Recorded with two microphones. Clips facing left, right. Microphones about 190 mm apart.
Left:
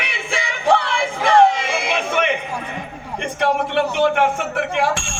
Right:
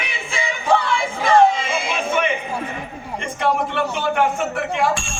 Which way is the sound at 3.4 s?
65° left (ahead or behind).